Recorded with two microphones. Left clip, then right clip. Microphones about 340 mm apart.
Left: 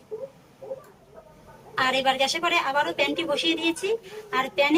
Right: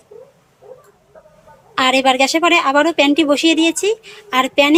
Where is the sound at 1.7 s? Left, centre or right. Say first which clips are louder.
Right 9 dB; centre.